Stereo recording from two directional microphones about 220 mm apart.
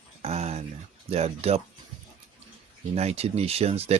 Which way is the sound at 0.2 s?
30° right (ahead or behind).